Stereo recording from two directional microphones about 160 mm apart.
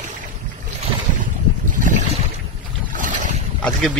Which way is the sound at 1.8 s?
55° right (ahead or behind).